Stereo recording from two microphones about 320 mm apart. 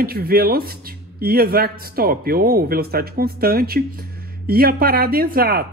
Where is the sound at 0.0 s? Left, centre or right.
Right.